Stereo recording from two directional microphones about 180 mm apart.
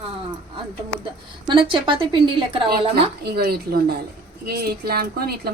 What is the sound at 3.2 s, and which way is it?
A woman's voice, 60° right (ahead or behind).